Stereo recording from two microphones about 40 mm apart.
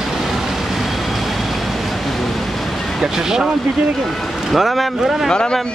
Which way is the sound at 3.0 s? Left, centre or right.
Centre.